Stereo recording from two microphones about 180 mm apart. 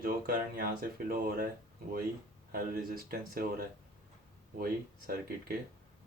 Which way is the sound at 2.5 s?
55° right (ahead or behind).